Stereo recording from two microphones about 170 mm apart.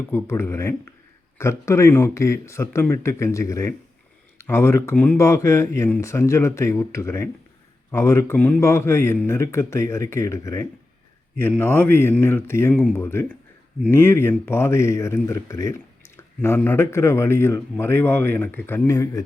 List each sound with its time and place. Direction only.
0.1 s speech: 15° left (ahead or behind)